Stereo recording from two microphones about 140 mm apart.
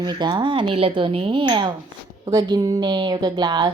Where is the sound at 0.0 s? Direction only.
30° right (ahead or behind).